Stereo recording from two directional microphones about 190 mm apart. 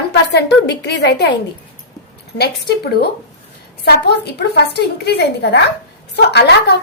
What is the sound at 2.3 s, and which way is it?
A woman's voice, 60° left (ahead or behind).